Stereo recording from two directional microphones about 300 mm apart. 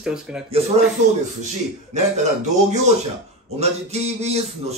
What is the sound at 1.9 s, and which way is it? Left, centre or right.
Speech, right.